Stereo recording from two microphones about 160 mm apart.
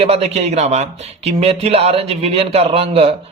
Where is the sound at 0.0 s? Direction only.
40° right (ahead or behind).